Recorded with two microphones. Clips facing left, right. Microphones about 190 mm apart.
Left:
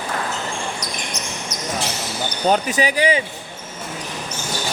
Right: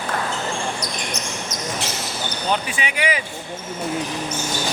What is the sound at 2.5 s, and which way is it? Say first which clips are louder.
Speech: left 7 dB; 40° left (ahead or behind).